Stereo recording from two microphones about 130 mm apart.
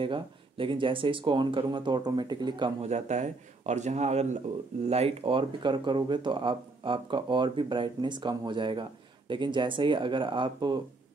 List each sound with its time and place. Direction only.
0.0 s speech: 40° right (ahead or behind)
2.8 s a man's voice: 60° right (ahead or behind); by 10.8 s 35° right (ahead or behind)